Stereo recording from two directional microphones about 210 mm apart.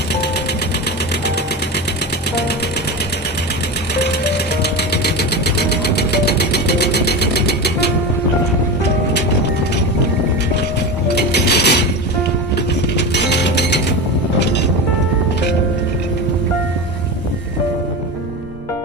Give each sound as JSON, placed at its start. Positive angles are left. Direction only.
{"t": 4.0, "sound": "music", "side_deg": 50}
{"t": 11.1, "sound": "mechanisms", "side_deg": 50}
{"t": 13.0, "sound": "music", "side_deg": 55}
{"t": 14.3, "sound": "vehicle", "side_deg": 55}